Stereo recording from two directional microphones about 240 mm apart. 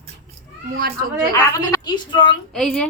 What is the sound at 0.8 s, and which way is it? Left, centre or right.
Speech, right.